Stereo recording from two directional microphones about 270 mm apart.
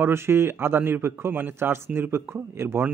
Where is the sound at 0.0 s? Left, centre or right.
Centre.